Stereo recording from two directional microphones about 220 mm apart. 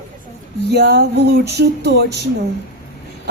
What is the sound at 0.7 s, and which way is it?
A woman's voice, 45° right (ahead or behind).